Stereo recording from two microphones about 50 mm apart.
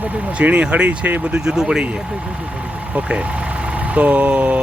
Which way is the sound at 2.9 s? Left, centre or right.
Right.